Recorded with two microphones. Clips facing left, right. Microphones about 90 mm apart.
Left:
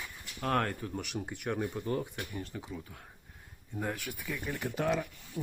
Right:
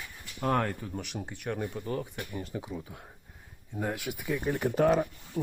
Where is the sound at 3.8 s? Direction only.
10° right (ahead or behind).